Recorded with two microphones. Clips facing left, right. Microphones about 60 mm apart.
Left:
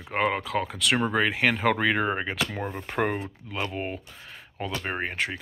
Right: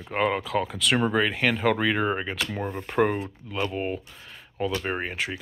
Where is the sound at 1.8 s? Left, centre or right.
Centre.